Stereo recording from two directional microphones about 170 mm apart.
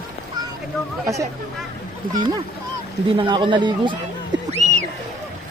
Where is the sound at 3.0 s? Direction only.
30° right (ahead or behind).